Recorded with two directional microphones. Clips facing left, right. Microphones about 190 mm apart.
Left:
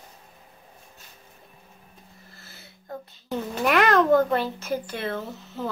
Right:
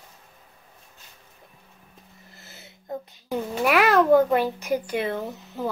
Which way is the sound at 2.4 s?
20° right (ahead or behind).